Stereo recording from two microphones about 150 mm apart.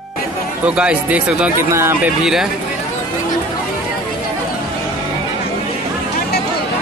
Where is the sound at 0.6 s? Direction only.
10° right (ahead or behind).